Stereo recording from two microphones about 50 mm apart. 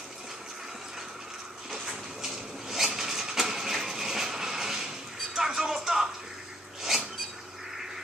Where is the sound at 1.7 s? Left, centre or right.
Centre.